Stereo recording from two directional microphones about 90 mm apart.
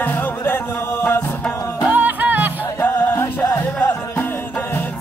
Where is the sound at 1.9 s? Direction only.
20° right (ahead or behind).